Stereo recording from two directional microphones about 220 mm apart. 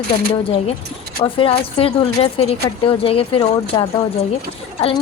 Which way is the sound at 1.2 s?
25° left (ahead or behind).